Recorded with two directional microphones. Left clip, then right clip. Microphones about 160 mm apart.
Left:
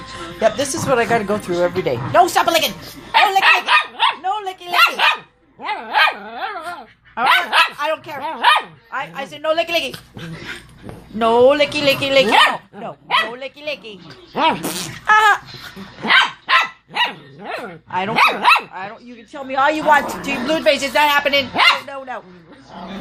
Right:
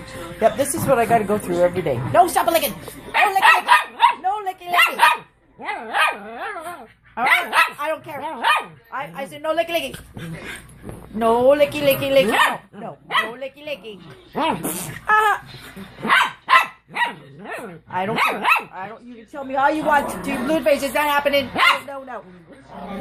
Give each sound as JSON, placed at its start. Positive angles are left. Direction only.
{"t": 0.3, "sound": "speech", "side_deg": 5}
{"t": 3.7, "sound": "dog", "side_deg": -15}
{"t": 4.2, "sound": "dog", "side_deg": 5}
{"t": 7.8, "sound": "speech", "side_deg": 10}
{"t": 11.2, "sound": "speech", "side_deg": 25}
{"t": 16.5, "sound": "dog", "side_deg": -15}
{"t": 16.9, "sound": "speech", "side_deg": 5}